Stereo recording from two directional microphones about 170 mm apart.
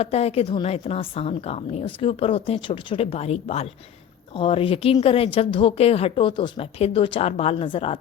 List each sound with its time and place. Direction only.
0.0 s a woman's voice: 35° left (ahead or behind)